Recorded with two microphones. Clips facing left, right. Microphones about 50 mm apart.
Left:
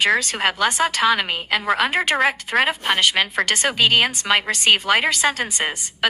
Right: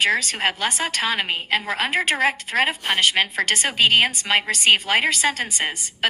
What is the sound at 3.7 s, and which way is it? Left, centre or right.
Speech, right.